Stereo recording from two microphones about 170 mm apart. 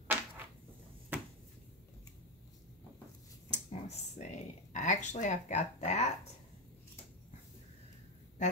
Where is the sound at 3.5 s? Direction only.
40° left (ahead or behind).